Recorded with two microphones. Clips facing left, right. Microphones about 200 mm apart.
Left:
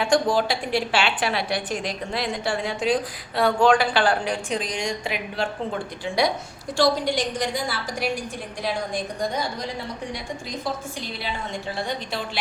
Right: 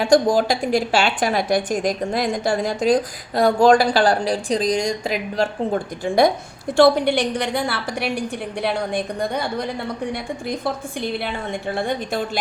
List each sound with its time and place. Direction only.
0.0 s a woman's voice: 40° right (ahead or behind)
6.7 s a woman's voice: 60° right (ahead or behind)